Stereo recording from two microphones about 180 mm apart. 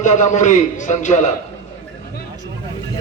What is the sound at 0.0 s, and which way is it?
A man's voice, 40° left (ahead or behind).